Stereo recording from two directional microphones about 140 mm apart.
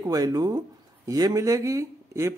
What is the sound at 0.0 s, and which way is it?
Speech, 25° right (ahead or behind).